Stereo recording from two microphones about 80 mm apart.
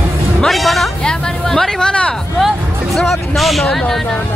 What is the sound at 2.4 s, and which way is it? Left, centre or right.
A man's voice, centre.